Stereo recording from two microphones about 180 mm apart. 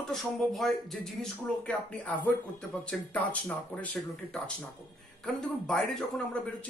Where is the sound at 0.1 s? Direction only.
Centre (ahead or behind).